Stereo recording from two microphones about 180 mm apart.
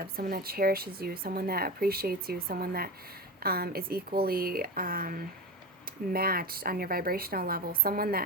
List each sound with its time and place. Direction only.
0.0 s speech: 55° right (ahead or behind)